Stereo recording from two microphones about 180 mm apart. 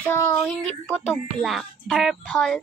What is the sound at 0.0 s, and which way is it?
A woman's voice, 10° left (ahead or behind).